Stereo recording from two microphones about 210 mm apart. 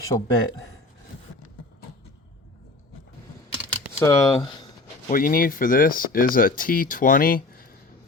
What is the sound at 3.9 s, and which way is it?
Speech, 15° left (ahead or behind).